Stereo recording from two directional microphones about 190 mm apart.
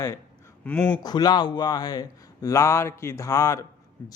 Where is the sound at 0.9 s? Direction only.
20° left (ahead or behind).